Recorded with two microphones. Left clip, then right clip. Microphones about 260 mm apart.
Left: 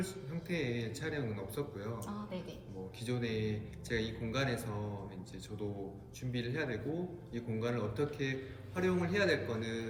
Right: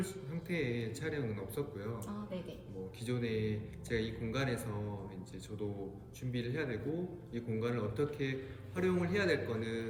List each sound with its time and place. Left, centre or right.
0.0 s a man's voice: centre
2.0 s a man's voice: left
3.1 s a man's voice: centre
6.3 s a man's voice: centre